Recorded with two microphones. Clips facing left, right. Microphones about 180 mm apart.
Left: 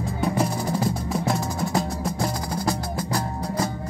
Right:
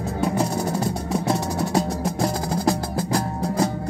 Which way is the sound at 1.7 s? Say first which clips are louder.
Right 3 dB; 35° right (ahead or behind).